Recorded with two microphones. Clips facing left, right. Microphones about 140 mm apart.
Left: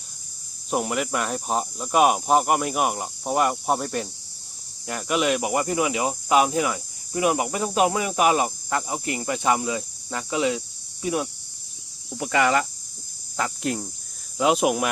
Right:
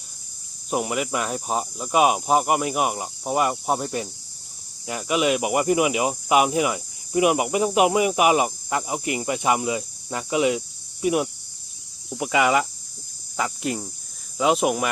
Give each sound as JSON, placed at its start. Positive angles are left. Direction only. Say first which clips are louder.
{"t": 0.7, "sound": "speech", "louder": "even", "side_deg": 0}